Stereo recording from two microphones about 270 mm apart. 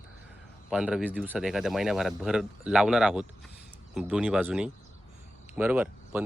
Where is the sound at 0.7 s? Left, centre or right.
Centre.